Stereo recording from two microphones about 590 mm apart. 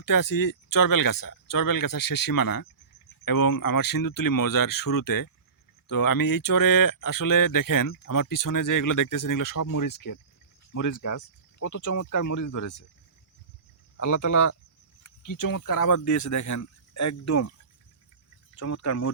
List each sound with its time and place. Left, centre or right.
0.0 s speech: left
13.9 s speech: left
18.5 s speech: left